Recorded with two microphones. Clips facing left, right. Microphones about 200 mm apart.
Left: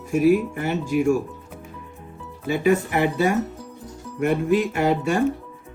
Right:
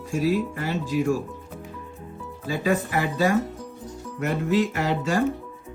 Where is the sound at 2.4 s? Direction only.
25° left (ahead or behind).